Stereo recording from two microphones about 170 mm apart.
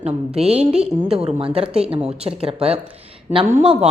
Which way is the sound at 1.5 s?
35° right (ahead or behind).